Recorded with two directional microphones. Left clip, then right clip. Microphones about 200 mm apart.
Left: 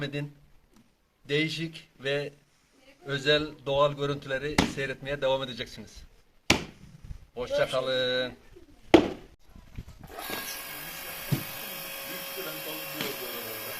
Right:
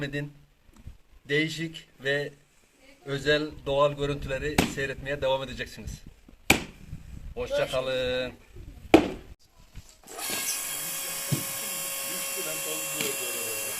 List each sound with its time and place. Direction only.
0.0 s speech: 10° right (ahead or behind)
1.3 s speech: 10° right (ahead or behind)
6.5 s a sound: 55° right (ahead or behind)
7.3 s speech: 10° right (ahead or behind)
8.9 s chop: 55° right (ahead or behind)
10.1 s dental drill: centre (ahead or behind)